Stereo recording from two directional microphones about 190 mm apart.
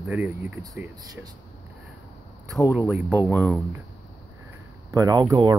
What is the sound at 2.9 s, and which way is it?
Speech, 10° right (ahead or behind).